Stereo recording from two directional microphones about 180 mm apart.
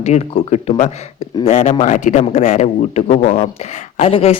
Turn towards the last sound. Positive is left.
turn(degrees=30)  # may be behind; listen again after turning